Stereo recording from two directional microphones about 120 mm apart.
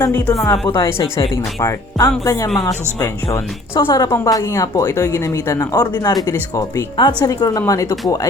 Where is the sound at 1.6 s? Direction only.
30° left (ahead or behind).